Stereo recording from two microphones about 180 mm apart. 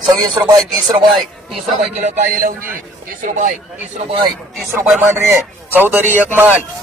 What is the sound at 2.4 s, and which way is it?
A man's voice, 50° right (ahead or behind).